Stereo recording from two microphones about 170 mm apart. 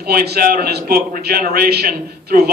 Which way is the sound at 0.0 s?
70° right (ahead or behind).